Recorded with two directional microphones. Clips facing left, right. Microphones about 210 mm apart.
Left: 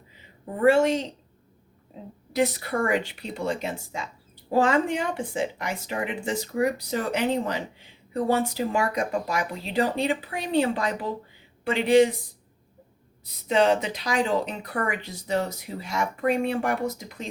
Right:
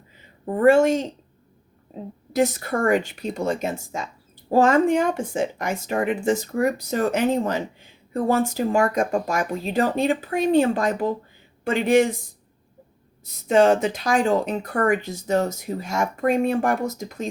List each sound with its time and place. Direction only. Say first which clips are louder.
0.4 s speech: right 4 dB; 50° right (ahead or behind)
2.3 s speech: right 3 dB; 45° right (ahead or behind)
13.2 s speech: right 5 dB; 45° right (ahead or behind)